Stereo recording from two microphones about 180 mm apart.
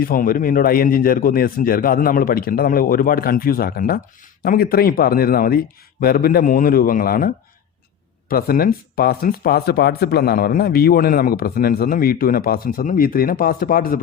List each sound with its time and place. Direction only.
0.0 s a man's voice: 50° left (ahead or behind)